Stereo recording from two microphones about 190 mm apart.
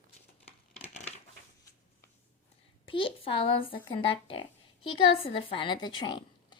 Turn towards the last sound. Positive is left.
turn(degrees=25)  # may be behind; listen again after turning